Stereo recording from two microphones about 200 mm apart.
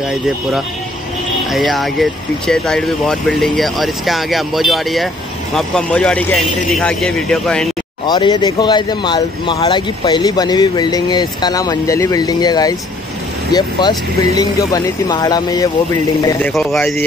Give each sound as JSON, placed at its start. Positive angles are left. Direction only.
{"t": 1.5, "sound": "speech", "side_deg": 0}
{"t": 8.1, "sound": "speech", "side_deg": 20}